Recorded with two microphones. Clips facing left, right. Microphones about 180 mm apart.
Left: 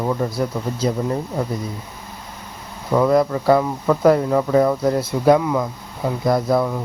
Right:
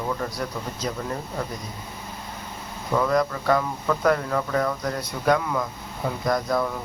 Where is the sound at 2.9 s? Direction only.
25° left (ahead or behind).